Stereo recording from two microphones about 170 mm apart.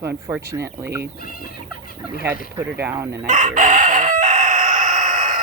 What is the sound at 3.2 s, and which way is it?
Crowing, 50° right (ahead or behind).